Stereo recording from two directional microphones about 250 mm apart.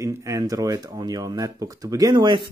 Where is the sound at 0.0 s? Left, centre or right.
Centre.